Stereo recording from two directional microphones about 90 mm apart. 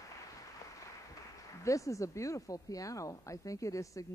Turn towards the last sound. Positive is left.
turn(degrees=35)  # may be behind; listen again after turning